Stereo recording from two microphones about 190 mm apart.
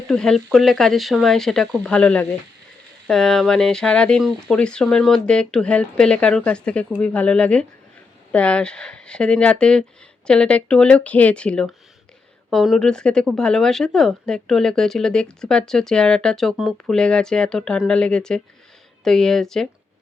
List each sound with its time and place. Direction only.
0.1 s speech: 5° left (ahead or behind)